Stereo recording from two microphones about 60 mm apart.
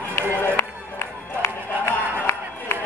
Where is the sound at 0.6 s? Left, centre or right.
Left.